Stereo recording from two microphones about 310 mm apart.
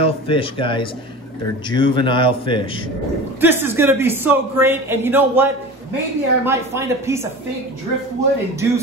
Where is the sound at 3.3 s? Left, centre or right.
Centre.